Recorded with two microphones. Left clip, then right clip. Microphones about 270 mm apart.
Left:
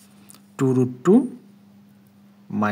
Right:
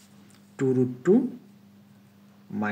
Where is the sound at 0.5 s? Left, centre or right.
Left.